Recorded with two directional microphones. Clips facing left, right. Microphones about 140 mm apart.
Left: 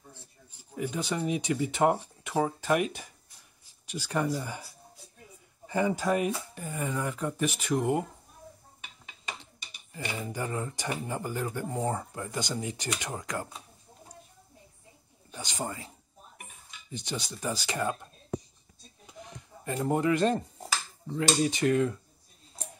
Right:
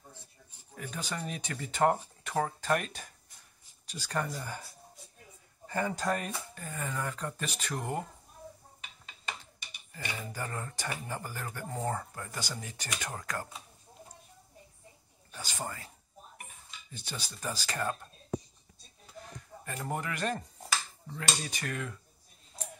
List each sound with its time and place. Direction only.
0.7 s speech: 15° left (ahead or behind)
5.7 s speech: 15° left (ahead or behind)
9.9 s speech: 20° left (ahead or behind)
15.3 s speech: 20° left (ahead or behind)
16.9 s speech: 15° left (ahead or behind)
19.6 s speech: 20° left (ahead or behind)